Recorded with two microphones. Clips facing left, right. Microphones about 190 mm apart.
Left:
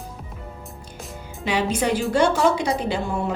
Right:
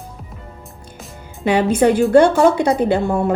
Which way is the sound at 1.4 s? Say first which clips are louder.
Right 8 dB; 55° right (ahead or behind).